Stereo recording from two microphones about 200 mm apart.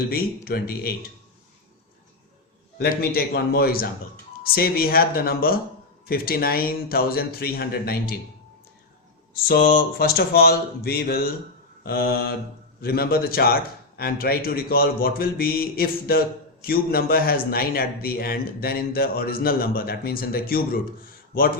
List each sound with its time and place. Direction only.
0.1 s a man's voice: 50° left (ahead or behind)
2.7 s a man's voice: 50° left (ahead or behind)
9.3 s a man's voice: 50° left (ahead or behind)